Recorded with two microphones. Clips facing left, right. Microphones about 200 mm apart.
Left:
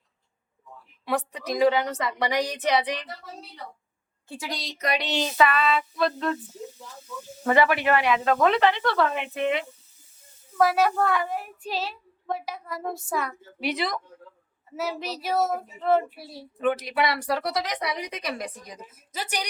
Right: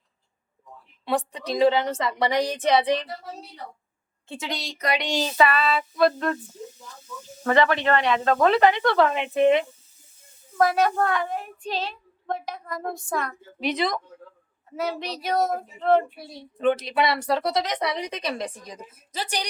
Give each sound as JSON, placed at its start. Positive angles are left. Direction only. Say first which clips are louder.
{"t": 1.0, "sound": "speech", "louder": "right 2 dB", "side_deg": -30}
{"t": 4.3, "sound": "speech", "louder": "right 2 dB", "side_deg": -25}
{"t": 4.9, "sound": "speech", "louder": "right 2 dB", "side_deg": -10}
{"t": 5.2, "sound": "a sound", "louder": "right 1 dB", "side_deg": -35}
{"t": 6.0, "sound": "a sound", "louder": "right 4 dB", "side_deg": -50}
{"t": 7.4, "sound": "speech", "louder": "right 1 dB", "side_deg": 10}
{"t": 8.6, "sound": "speech", "louder": "right 3 dB", "side_deg": -15}
{"t": 10.6, "sound": "speech", "louder": "even", "side_deg": 5}
{"t": 13.4, "sound": "speech", "louder": "right 3 dB", "side_deg": -20}
{"t": 14.8, "sound": "speech", "louder": "right 2 dB", "side_deg": 5}
{"t": 16.6, "sound": "speech", "louder": "right 3 dB", "side_deg": -25}